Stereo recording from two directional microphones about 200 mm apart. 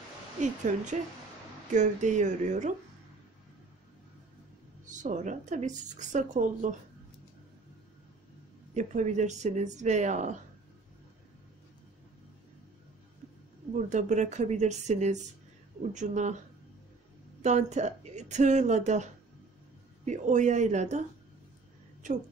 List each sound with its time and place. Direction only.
0.4 s speech: 40° right (ahead or behind)
4.8 s speech: 40° right (ahead or behind)
8.7 s speech: 35° right (ahead or behind)
13.7 s speech: 35° right (ahead or behind)
17.4 s speech: 35° right (ahead or behind)
20.1 s speech: 35° right (ahead or behind)